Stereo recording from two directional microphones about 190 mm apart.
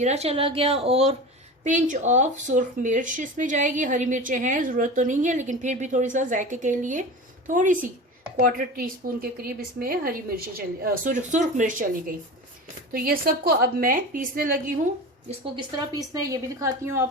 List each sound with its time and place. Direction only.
0.0 s a woman's voice: 35° right (ahead or behind)
15.9 s a woman's voice: 20° right (ahead or behind)